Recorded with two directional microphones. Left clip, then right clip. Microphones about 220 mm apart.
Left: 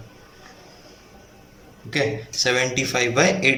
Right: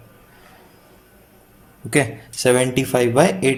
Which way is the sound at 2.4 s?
30° right (ahead or behind).